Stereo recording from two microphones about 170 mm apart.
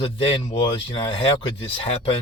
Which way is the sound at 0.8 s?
30° left (ahead or behind).